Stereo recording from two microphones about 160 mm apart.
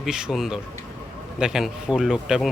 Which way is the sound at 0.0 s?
5° right (ahead or behind).